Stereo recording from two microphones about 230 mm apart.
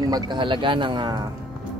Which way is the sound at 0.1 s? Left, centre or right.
Centre.